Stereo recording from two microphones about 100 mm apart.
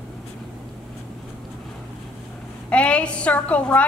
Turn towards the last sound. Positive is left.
turn(degrees=15)  # may be behind; listen again after turning